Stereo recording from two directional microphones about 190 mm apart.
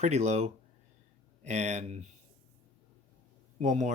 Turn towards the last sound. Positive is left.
turn(degrees=-40)  # may be behind; listen again after turning